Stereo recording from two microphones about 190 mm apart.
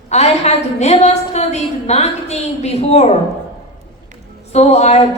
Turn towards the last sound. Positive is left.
turn(degrees=35)  # may be behind; listen again after turning